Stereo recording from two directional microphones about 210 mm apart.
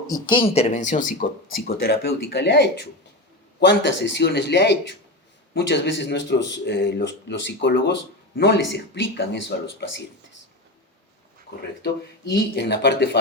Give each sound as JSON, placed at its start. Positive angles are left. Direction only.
{"t": 0.1, "sound": "speech", "side_deg": 25}
{"t": 11.8, "sound": "speech", "side_deg": 55}